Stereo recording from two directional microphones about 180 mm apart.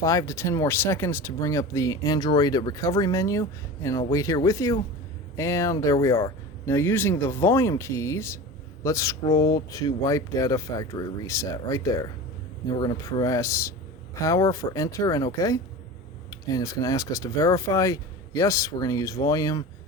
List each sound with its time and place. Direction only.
0.0 s speech: 15° left (ahead or behind)